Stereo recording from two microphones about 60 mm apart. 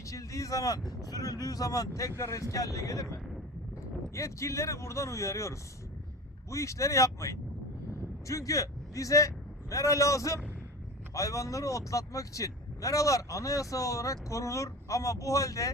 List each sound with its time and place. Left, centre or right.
0.0 s speech: left
0.9 s speech: left